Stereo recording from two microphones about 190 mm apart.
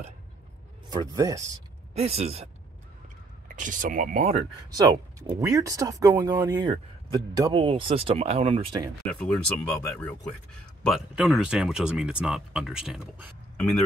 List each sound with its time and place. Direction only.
0.8 s speech: 20° right (ahead or behind)
2.0 s speech: 30° right (ahead or behind)
3.4 s speech: 45° right (ahead or behind)
4.6 s speech: 20° right (ahead or behind)
9.0 s speech: 5° left (ahead or behind)